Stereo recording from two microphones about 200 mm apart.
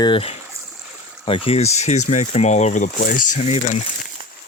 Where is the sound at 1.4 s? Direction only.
35° left (ahead or behind).